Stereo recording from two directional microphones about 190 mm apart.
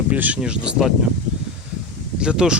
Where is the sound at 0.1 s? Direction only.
10° right (ahead or behind).